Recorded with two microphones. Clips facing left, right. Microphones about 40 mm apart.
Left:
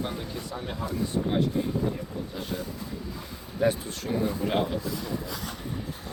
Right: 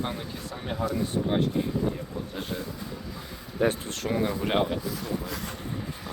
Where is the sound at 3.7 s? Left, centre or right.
Right.